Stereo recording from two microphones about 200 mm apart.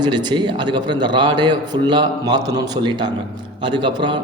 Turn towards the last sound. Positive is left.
turn(degrees=-25)  # may be behind; listen again after turning